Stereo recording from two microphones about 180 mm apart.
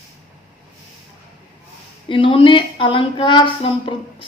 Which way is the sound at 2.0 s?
30° left (ahead or behind).